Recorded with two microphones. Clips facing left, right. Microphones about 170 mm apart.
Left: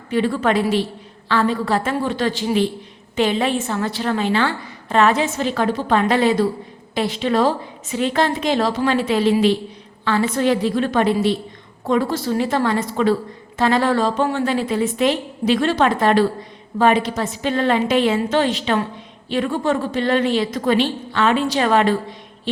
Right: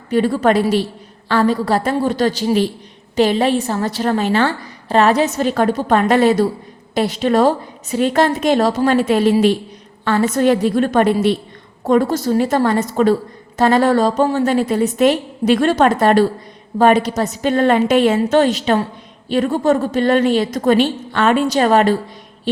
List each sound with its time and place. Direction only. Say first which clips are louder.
0.1 s a woman's voice: right 4 dB; 40° right (ahead or behind)